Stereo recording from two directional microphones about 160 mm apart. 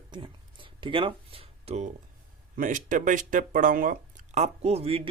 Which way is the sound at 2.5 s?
55° right (ahead or behind).